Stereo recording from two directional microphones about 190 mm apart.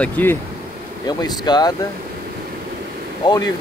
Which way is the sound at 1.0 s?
20° left (ahead or behind).